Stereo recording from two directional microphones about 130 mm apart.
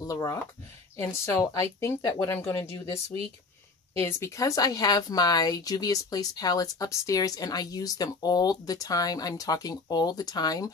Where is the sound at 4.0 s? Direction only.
20° left (ahead or behind).